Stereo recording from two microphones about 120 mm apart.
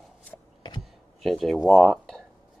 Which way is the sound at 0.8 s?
Centre (ahead or behind).